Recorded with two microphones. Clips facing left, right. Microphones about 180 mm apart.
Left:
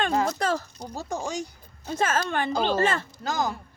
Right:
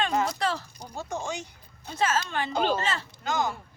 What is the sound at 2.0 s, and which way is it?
A woman's voice, 50° left (ahead or behind).